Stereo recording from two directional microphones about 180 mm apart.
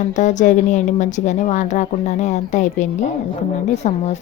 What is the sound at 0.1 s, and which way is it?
Speech, 40° left (ahead or behind).